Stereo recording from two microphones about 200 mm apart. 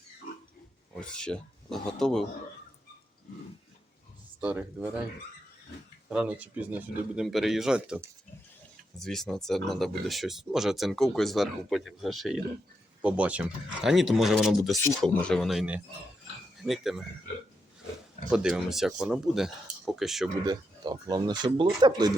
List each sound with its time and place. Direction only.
0.9 s speech: 5° left (ahead or behind)
4.4 s speech: 5° right (ahead or behind)
6.1 s speech: 5° right (ahead or behind)
18.3 s speech: 5° right (ahead or behind)
20.4 s speech: 20° right (ahead or behind)